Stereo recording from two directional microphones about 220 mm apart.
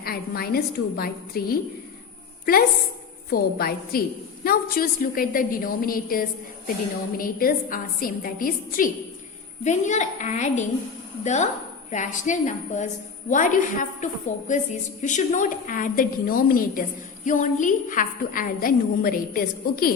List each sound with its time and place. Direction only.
0.0 s a woman's voice: 45° left (ahead or behind)
3.2 s a woman's voice: 45° left (ahead or behind)